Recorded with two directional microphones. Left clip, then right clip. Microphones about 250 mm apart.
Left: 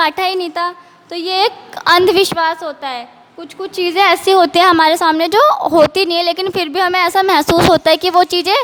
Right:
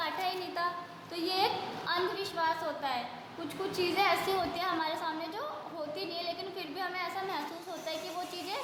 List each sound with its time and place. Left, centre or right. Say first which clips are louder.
0.0 s a woman's voice: left 19 dB; left